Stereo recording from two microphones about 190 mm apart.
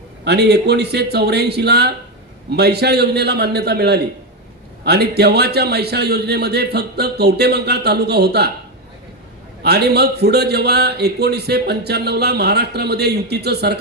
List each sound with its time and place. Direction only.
0.3 s speech: 60° right (ahead or behind)
9.6 s speech: 60° right (ahead or behind)